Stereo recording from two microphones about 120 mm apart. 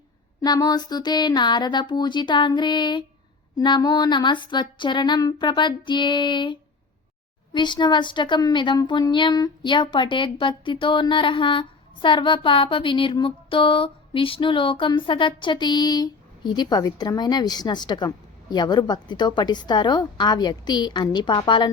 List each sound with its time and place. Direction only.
0.4 s a woman's voice: 35° left (ahead or behind)